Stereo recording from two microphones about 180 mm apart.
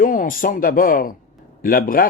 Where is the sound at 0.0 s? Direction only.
50° left (ahead or behind).